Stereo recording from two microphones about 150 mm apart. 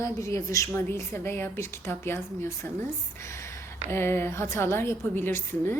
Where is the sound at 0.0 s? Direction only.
20° left (ahead or behind).